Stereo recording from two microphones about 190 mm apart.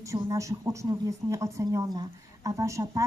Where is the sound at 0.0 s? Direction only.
15° right (ahead or behind).